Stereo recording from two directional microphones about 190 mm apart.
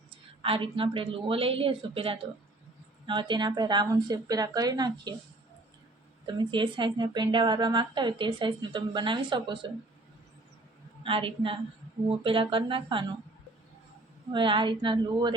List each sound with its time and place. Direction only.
0.4 s speech: 25° right (ahead or behind)
6.2 s speech: 25° right (ahead or behind)
11.0 s speech: 25° right (ahead or behind)
14.3 s speech: 25° right (ahead or behind)